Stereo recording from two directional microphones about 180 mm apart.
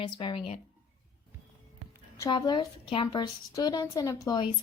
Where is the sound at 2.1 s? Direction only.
20° left (ahead or behind).